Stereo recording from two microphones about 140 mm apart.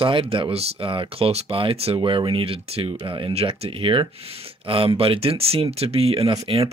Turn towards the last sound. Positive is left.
turn(degrees=-45)  # may be behind; listen again after turning